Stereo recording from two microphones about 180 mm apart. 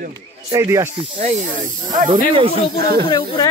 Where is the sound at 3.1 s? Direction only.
25° left (ahead or behind).